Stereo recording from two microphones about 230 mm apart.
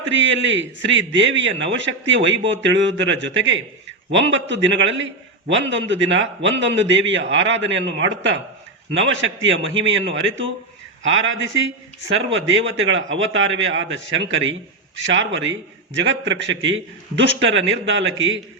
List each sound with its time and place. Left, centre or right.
0.0 s a man's voice: right